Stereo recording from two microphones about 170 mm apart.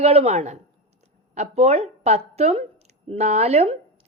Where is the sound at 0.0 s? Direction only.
35° right (ahead or behind).